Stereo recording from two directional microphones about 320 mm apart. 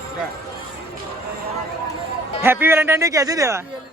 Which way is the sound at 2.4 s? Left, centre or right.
Centre.